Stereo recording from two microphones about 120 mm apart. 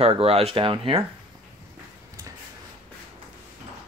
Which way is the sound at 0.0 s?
55° right (ahead or behind).